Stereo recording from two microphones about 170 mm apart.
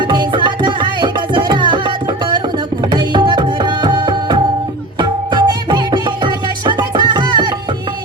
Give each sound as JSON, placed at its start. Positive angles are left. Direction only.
{"t": 0.1, "sound": "music", "side_deg": -25}
{"t": 2.9, "sound": "music", "side_deg": -25}